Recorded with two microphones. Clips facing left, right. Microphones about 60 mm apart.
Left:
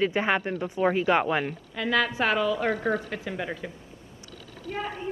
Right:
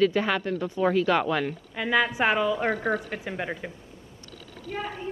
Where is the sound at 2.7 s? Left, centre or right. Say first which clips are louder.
Even; right; by 3.7 s centre.